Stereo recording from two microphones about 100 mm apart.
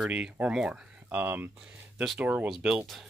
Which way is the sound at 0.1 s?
10° right (ahead or behind).